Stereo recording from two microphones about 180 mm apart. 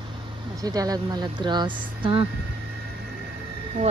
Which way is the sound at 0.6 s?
20° right (ahead or behind).